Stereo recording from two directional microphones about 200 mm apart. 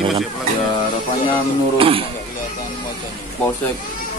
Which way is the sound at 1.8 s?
25° right (ahead or behind).